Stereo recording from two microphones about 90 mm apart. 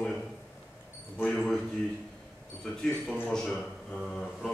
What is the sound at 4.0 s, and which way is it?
Mantra, 5° left (ahead or behind).